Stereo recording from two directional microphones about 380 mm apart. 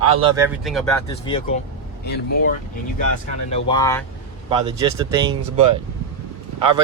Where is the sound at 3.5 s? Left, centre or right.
Centre.